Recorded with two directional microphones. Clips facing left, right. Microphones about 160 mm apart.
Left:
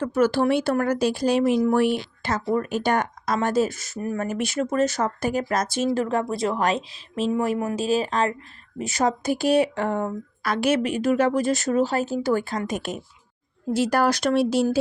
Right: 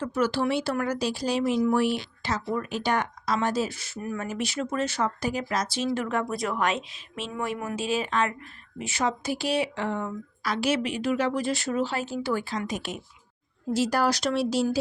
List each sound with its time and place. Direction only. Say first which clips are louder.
0.0 s speech: left 5 dB; 50° left (ahead or behind)